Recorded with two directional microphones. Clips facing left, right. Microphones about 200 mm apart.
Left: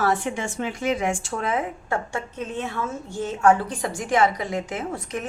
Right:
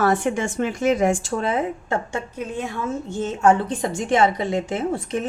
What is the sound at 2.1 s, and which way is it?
A woman's voice, 10° right (ahead or behind).